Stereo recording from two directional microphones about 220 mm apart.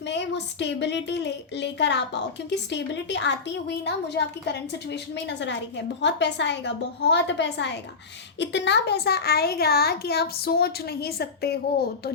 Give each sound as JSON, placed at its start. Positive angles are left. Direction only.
{"t": 0.0, "sound": "a woman's voice", "side_deg": 50}